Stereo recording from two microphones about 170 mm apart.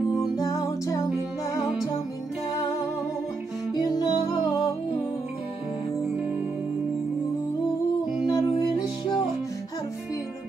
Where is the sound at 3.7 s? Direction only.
25° left (ahead or behind).